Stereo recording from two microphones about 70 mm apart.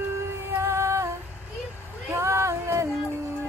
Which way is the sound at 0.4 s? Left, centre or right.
Right.